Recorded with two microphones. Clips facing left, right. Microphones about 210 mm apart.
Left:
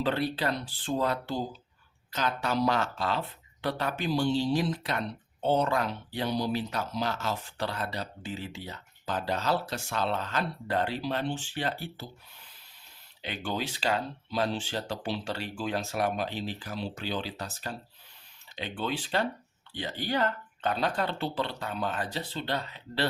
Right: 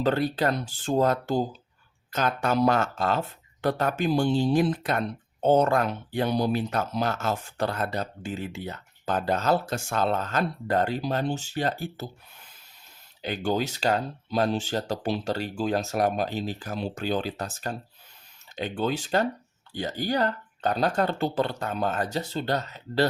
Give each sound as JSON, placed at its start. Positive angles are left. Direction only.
{"t": 0.0, "sound": "speech", "side_deg": -45}
{"t": 13.2, "sound": "speech", "side_deg": -40}